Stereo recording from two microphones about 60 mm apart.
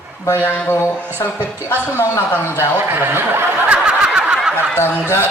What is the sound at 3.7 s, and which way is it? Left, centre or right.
Snicker, right.